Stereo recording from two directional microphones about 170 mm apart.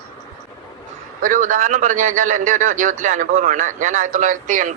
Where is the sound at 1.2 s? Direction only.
50° right (ahead or behind).